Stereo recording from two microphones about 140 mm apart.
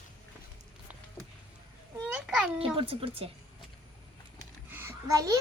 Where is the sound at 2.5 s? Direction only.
40° right (ahead or behind).